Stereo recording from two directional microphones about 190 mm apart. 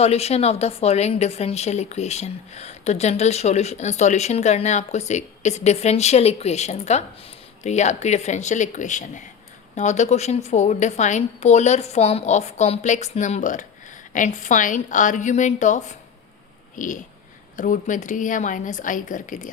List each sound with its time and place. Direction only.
0.0 s a woman's voice: 35° left (ahead or behind)
16.7 s a sound: 45° left (ahead or behind)
17.6 s a woman's voice: 45° left (ahead or behind)